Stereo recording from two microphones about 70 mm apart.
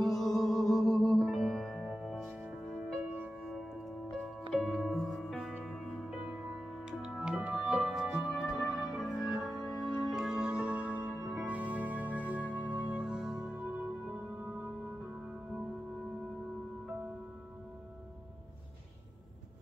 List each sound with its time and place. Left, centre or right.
0.0 s music: centre
3.0 s music: right
3.4 s music: centre; by 11.1 s right
11.1 s music: centre
11.4 s music: right
13.7 s music: right